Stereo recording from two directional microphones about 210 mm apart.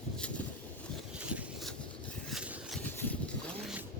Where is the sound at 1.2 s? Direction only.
5° right (ahead or behind).